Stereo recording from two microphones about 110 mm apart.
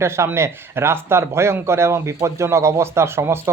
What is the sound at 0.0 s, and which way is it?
A man's voice, 25° right (ahead or behind).